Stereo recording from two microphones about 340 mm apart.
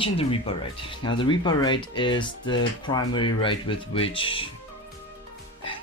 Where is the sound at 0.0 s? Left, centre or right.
Centre.